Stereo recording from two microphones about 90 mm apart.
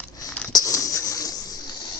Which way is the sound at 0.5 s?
40° left (ahead or behind).